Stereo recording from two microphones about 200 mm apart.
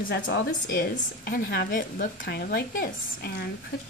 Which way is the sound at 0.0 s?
40° left (ahead or behind).